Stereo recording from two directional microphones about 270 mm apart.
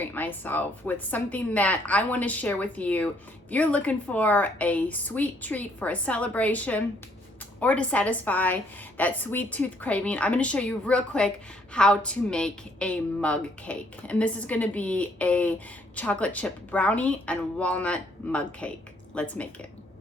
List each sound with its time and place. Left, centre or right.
0.0 s a woman's voice: centre